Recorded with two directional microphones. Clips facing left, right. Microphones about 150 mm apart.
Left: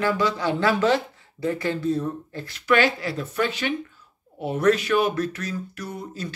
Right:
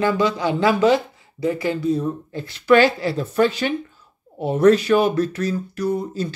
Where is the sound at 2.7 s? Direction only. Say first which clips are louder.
Right 6 dB; 30° right (ahead or behind).